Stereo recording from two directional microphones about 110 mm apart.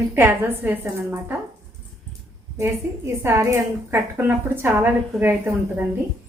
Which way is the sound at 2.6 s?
25° right (ahead or behind).